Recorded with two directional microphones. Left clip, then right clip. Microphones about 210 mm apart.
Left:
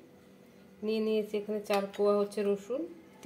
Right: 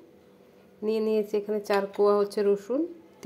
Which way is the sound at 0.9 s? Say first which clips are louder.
Right 5 dB; 40° right (ahead or behind).